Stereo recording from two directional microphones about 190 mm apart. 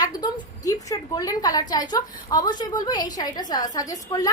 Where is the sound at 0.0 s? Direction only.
20° left (ahead or behind).